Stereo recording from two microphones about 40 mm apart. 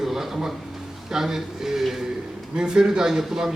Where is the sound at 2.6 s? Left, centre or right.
Centre.